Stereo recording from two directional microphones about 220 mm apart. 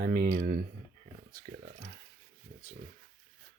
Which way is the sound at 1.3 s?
40° right (ahead or behind).